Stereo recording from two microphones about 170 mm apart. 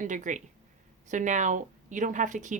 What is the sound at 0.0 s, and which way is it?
A woman's voice, 50° right (ahead or behind).